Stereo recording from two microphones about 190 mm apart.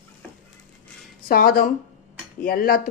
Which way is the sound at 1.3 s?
50° left (ahead or behind).